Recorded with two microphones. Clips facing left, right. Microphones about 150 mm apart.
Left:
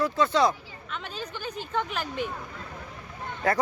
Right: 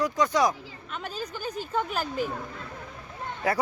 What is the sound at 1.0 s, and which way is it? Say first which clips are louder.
Speech: right 3 dB; 40° right (ahead or behind).